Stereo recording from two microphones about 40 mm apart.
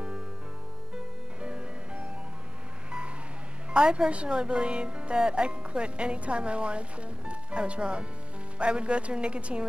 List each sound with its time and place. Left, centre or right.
0.9 s music: right
3.7 s speech: right